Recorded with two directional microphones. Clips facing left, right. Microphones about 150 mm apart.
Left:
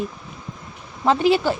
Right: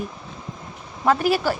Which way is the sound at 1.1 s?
25° left (ahead or behind).